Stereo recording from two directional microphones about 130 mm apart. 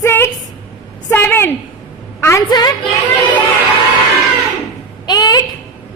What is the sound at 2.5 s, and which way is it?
Speech, 30° left (ahead or behind).